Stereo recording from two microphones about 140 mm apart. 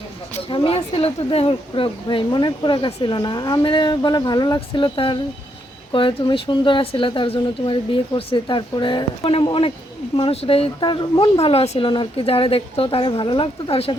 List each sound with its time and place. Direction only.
0.4 s speech: 40° left (ahead or behind)